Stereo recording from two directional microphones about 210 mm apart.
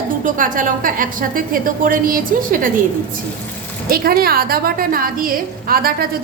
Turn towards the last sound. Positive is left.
turn(degrees=-45)  # may be behind; listen again after turning